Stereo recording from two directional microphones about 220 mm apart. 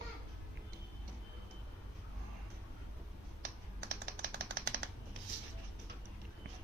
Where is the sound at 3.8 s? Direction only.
50° right (ahead or behind).